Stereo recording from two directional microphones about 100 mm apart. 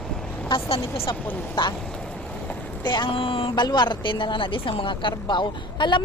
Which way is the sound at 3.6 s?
45° left (ahead or behind).